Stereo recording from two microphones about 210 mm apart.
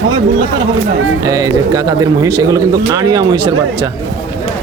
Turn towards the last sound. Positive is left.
turn(degrees=-25)  # may be behind; listen again after turning